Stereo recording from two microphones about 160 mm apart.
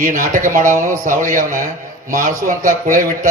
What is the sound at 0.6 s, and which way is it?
Speech, 20° right (ahead or behind).